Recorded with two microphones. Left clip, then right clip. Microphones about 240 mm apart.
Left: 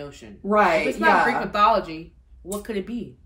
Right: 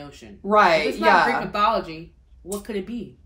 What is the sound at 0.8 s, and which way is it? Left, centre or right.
Speech, centre.